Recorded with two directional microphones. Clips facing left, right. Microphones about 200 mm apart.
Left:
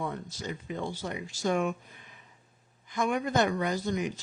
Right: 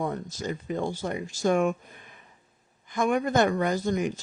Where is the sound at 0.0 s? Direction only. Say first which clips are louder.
Right 5 dB; 45° right (ahead or behind).